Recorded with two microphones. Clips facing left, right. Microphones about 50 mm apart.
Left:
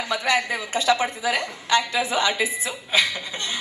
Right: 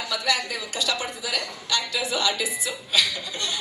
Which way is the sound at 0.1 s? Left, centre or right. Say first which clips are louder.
Left 4 dB; left.